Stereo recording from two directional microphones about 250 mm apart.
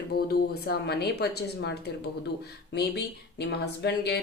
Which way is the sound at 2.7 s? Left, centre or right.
Left.